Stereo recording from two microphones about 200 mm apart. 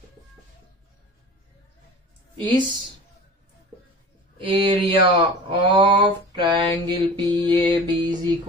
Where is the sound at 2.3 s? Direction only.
25° right (ahead or behind).